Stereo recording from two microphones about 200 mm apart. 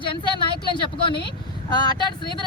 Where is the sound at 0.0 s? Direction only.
25° left (ahead or behind).